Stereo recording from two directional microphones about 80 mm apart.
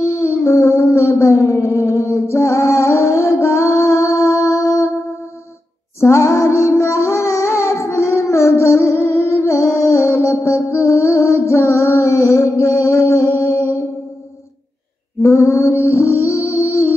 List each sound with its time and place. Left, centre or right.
0.2 s music: left
5.9 s music: left
15.2 s mantra: left
15.8 s music: left